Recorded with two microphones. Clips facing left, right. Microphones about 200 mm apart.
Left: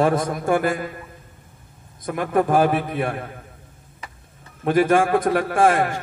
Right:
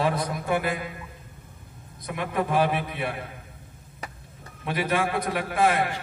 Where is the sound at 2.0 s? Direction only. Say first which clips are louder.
Left 7 dB; 50° left (ahead or behind).